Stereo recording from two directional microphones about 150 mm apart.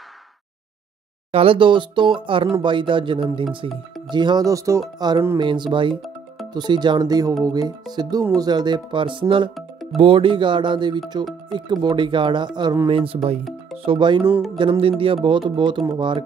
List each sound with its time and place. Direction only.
1.3 s speech: 40° right (ahead or behind)
13.4 s speech: centre (ahead or behind)
13.8 s speech: 30° right (ahead or behind)
14.3 s speech: centre (ahead or behind)
14.6 s speech: 35° right (ahead or behind)